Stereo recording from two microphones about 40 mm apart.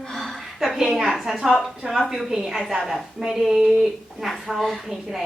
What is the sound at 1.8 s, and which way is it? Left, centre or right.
Speech, right.